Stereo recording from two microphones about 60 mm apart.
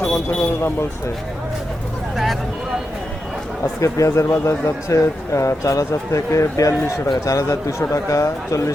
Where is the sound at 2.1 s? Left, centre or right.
Centre.